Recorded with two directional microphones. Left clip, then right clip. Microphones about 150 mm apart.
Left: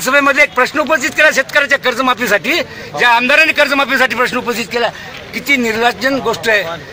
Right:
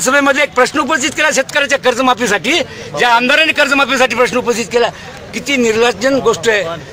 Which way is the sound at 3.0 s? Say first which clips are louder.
Left 1 dB; 25° right (ahead or behind).